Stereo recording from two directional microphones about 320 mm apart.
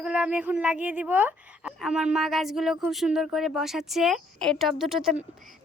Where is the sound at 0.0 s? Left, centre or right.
Centre.